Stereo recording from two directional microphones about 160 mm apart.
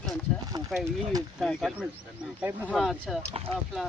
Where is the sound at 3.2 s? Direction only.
40° right (ahead or behind).